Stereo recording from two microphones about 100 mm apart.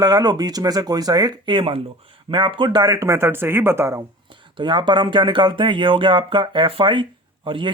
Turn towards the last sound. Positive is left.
turn(degrees=-60)  # may be behind; listen again after turning